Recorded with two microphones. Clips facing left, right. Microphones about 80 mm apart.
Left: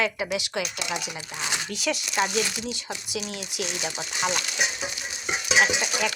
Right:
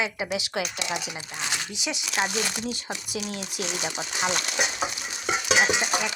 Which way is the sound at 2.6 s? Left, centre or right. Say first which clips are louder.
Right 1 dB; right.